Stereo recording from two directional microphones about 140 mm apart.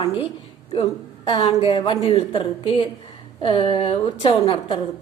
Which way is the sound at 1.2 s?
40° left (ahead or behind).